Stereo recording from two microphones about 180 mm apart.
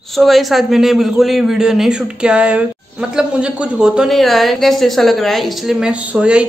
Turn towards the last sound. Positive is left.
turn(degrees=-5)  # may be behind; listen again after turning